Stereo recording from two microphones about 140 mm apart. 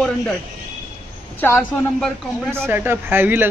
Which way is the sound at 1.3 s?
15° left (ahead or behind).